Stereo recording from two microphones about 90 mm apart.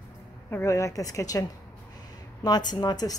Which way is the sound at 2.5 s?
50° left (ahead or behind).